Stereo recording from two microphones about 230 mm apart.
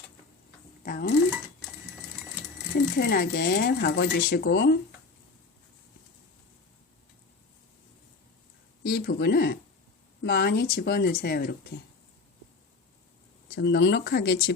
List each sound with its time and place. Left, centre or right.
0.8 s speech: left
3.0 s speech: left
8.8 s speech: left
13.6 s speech: left